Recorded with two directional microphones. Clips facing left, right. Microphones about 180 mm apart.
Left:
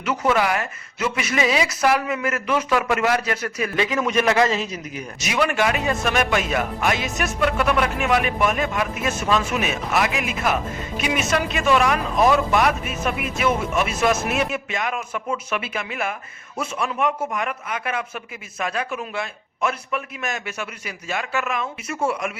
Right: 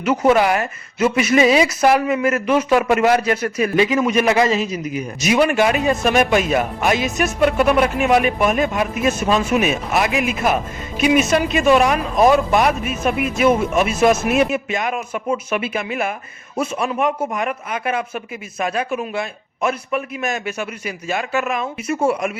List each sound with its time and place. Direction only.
0.0 s speech: 20° right (ahead or behind)
3.8 s a man's voice: 10° right (ahead or behind)
5.3 s speech: 20° right (ahead or behind)